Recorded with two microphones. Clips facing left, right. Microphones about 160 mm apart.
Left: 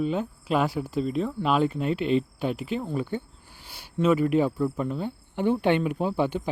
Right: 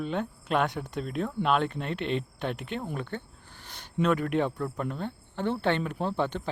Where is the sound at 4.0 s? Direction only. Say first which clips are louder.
Left 4 dB; 5° left (ahead or behind).